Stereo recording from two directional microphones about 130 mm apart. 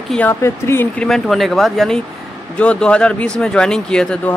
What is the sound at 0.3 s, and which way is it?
Speech, 20° left (ahead or behind).